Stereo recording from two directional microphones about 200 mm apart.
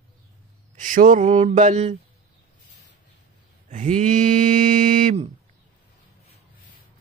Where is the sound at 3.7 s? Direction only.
40° right (ahead or behind).